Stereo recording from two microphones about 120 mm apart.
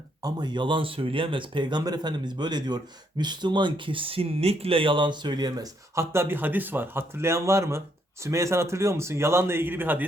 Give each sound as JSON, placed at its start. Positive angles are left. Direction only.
{"t": 0.2, "sound": "a man's voice", "side_deg": -35}